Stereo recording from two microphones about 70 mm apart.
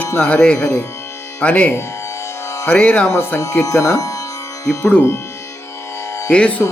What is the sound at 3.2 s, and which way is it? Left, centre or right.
Speech, left.